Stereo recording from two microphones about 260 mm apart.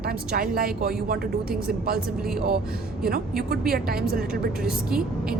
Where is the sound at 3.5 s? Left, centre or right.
Right.